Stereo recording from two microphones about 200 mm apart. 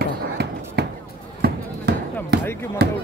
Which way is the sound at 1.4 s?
55° right (ahead or behind).